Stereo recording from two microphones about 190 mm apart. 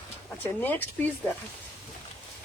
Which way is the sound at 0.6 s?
10° left (ahead or behind).